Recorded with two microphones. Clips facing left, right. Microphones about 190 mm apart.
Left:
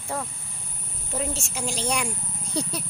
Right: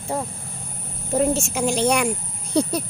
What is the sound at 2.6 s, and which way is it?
Speech, 45° right (ahead or behind).